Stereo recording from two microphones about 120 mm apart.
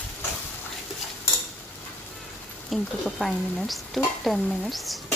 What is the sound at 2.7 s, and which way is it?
Speech, centre (ahead or behind).